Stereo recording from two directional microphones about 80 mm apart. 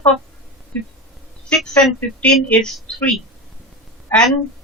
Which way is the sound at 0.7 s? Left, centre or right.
Centre.